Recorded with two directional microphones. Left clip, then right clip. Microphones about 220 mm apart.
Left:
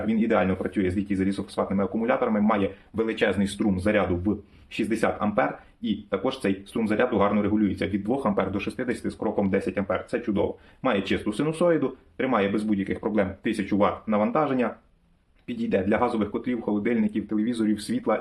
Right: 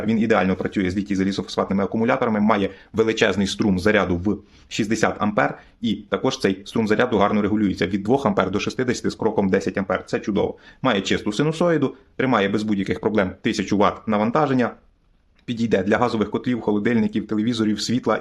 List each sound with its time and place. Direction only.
0.1 s speech: 55° right (ahead or behind)